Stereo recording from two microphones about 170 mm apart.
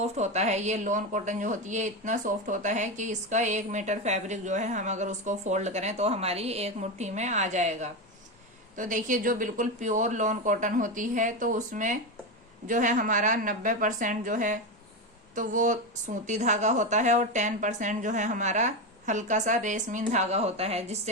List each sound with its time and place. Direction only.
0.0 s a woman's voice: 40° right (ahead or behind)